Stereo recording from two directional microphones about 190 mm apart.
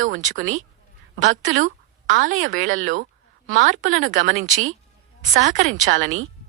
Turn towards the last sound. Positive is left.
turn(degrees=-40)  # may be behind; listen again after turning